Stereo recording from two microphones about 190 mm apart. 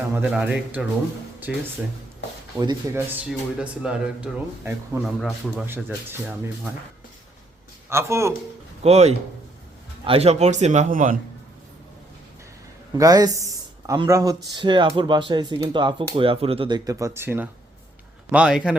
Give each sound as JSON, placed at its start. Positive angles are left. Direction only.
{"t": 0.1, "sound": "speech", "side_deg": -5}
{"t": 2.6, "sound": "speech", "side_deg": -20}
{"t": 7.9, "sound": "speech", "side_deg": -15}
{"t": 8.8, "sound": "a man's voice", "side_deg": -35}
{"t": 12.9, "sound": "speech", "side_deg": -20}